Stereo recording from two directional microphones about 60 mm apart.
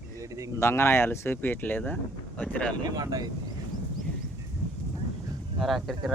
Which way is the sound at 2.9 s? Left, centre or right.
Right.